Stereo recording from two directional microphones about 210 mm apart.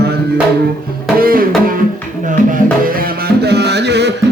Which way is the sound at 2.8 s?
50° right (ahead or behind).